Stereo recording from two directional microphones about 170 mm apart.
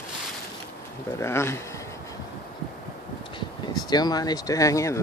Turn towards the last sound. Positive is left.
turn(degrees=20)  # may be behind; listen again after turning